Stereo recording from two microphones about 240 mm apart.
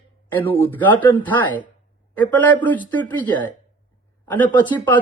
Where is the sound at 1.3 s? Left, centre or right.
Centre.